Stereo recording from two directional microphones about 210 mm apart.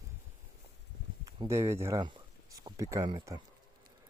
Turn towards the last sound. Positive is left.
turn(degrees=-20)  # may be behind; listen again after turning